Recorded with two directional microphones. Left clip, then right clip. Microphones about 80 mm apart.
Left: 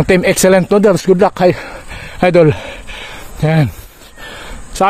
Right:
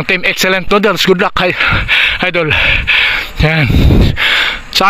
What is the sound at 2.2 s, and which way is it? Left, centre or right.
Speech, left.